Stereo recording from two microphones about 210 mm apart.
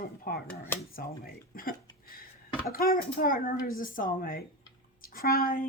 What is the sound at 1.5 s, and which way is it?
A woman's voice, 45° left (ahead or behind).